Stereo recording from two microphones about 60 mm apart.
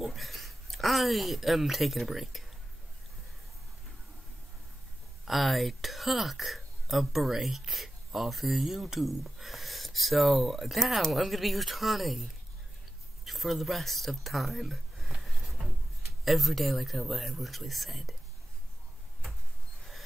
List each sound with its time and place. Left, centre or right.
0.0 s speech: centre
5.2 s speech: centre
13.2 s a sound: centre
16.3 s speech: centre